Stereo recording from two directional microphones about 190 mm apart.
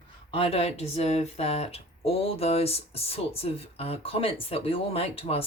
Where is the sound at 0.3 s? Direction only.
30° left (ahead or behind).